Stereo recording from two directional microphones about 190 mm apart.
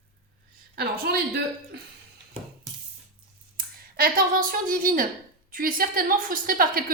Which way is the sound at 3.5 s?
50° right (ahead or behind).